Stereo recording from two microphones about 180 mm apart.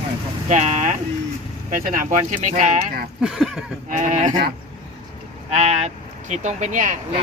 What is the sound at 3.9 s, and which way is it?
Speech, 45° right (ahead or behind).